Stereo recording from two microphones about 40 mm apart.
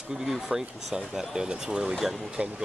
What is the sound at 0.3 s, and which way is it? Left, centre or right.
Speech, centre.